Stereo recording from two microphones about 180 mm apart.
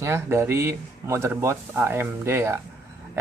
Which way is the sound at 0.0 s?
15° right (ahead or behind).